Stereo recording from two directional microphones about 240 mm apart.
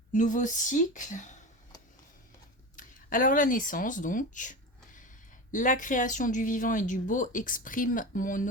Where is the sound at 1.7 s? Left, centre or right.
Centre.